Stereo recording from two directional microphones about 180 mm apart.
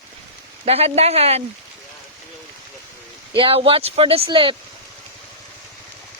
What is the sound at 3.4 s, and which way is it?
Speech, 30° right (ahead or behind).